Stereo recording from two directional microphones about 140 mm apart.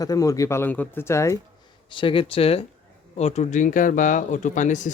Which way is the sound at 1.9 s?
40° left (ahead or behind).